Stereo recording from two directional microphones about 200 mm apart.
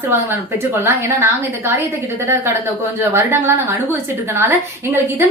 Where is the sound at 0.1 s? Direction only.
10° right (ahead or behind).